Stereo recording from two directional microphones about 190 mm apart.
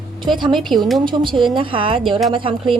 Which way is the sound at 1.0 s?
25° right (ahead or behind).